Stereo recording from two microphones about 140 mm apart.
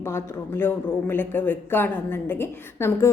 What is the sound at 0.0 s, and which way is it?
A woman's voice, 15° left (ahead or behind).